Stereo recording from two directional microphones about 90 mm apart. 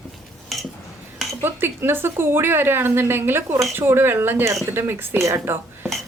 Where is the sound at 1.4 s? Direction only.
25° right (ahead or behind).